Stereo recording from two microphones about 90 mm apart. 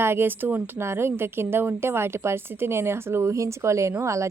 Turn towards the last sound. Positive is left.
turn(degrees=-35)  # may be behind; listen again after turning